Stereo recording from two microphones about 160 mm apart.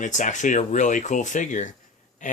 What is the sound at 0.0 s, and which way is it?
Speech, 50° left (ahead or behind).